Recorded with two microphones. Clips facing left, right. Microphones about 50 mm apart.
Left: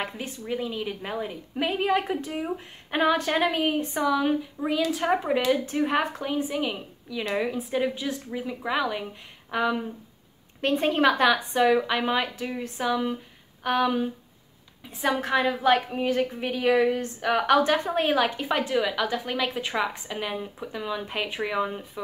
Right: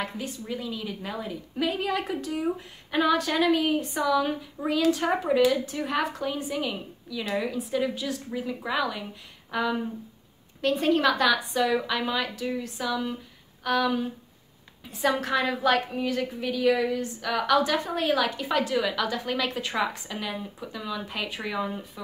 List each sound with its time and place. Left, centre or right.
0.0 s a woman's voice: left
4.6 s a woman's voice: centre
4.9 s a woman's voice: centre